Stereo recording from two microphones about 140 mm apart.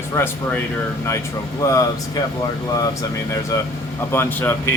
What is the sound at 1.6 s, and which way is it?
Speech, 25° left (ahead or behind).